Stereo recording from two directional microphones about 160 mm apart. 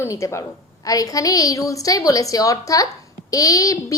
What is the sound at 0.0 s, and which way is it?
A woman's voice, 20° left (ahead or behind).